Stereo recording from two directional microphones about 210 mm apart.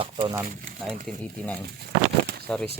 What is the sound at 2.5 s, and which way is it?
Speech, 5° left (ahead or behind).